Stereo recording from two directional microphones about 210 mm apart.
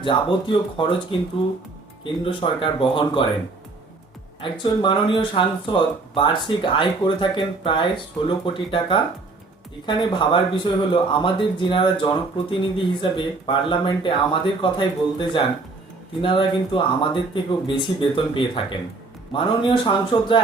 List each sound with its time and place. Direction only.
0.0 s speech: 25° left (ahead or behind)
2.2 s speech: 25° left (ahead or behind)
4.4 s speech: 25° left (ahead or behind)